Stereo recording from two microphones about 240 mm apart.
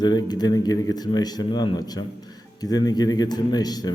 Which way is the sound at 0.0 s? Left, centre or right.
Centre.